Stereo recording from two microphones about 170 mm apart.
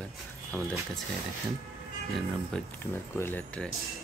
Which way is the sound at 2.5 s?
10° left (ahead or behind).